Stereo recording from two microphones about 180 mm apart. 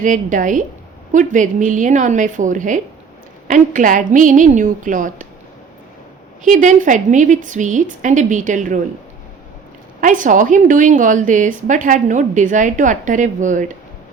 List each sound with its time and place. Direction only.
0.0 s a woman's voice: 45° right (ahead or behind)
6.4 s a woman's voice: 45° right (ahead or behind)
10.0 s a woman's voice: 45° right (ahead or behind)